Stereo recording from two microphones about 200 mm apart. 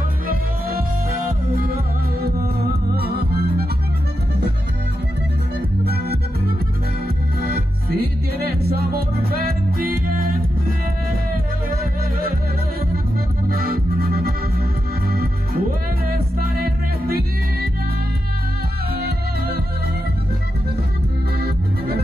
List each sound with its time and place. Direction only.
0.3 s music: 45° right (ahead or behind)
3.0 s music: 50° right (ahead or behind)
7.4 s music: 50° right (ahead or behind)
13.5 s music: 45° right (ahead or behind)
16.1 s music: 50° right (ahead or behind)
18.9 s music: 50° right (ahead or behind)
21.4 s music: 50° right (ahead or behind)